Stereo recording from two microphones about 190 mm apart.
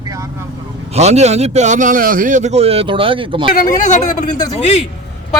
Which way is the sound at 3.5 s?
45° left (ahead or behind).